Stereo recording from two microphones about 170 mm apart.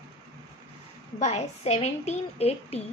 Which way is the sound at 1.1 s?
40° left (ahead or behind).